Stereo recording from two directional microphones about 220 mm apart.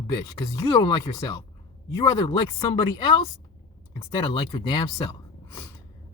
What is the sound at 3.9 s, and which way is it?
Speech, 25° left (ahead or behind).